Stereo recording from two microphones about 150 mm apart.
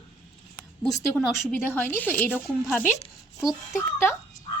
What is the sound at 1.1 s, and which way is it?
Speech, 15° left (ahead or behind).